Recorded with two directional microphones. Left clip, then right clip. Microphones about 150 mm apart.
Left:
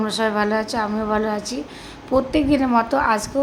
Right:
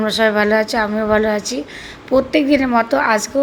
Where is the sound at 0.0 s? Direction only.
15° right (ahead or behind).